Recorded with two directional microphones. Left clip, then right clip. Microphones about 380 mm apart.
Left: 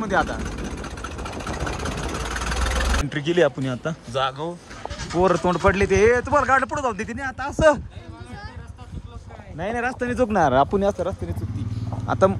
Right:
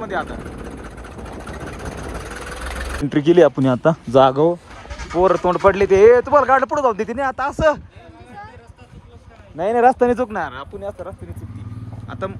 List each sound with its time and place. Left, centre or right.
0.0 s speech: centre
3.1 s speech: centre
4.8 s sheep: centre
5.2 s speech: centre
9.6 s speech: centre
10.8 s speech: left
12.1 s speech: centre